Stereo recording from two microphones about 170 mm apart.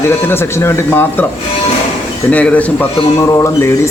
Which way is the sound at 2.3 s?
10° left (ahead or behind).